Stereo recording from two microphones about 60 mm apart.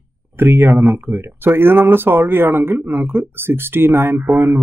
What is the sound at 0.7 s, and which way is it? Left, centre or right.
Speech, right.